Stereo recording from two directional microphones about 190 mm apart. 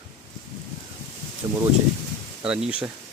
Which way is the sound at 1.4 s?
20° right (ahead or behind).